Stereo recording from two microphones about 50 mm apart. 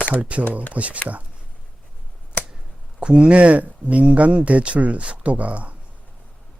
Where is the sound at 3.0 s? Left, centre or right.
Right.